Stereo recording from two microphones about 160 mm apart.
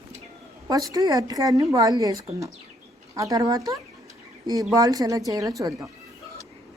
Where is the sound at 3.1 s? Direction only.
20° right (ahead or behind).